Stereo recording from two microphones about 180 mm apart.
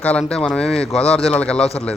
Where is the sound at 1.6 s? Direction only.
35° left (ahead or behind).